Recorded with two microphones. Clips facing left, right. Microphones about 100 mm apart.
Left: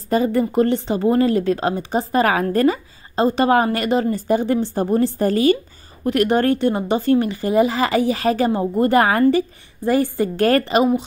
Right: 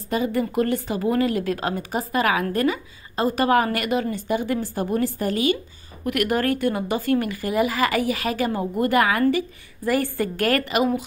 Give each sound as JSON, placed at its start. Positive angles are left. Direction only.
{"t": 0.1, "sound": "speech", "side_deg": 35}
{"t": 9.8, "sound": "speech", "side_deg": 20}